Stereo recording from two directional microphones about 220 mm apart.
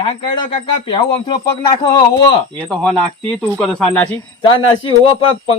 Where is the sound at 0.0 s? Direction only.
20° left (ahead or behind).